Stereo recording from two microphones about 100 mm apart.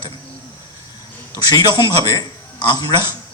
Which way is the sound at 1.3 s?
45° left (ahead or behind).